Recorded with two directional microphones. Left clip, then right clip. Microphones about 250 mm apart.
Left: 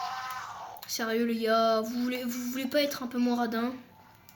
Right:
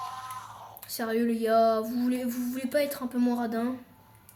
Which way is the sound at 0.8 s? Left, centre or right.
Left.